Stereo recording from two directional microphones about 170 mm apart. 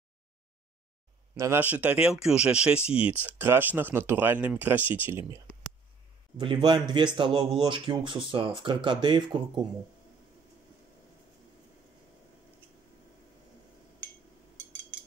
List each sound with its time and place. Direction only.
1.3 s speech: 15° right (ahead or behind)
6.3 s speech: 30° right (ahead or behind)